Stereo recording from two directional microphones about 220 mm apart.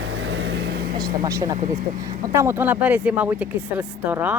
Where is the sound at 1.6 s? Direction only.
35° right (ahead or behind).